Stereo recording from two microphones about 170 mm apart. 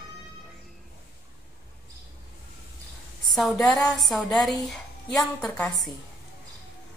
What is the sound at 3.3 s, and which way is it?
Speech, centre (ahead or behind).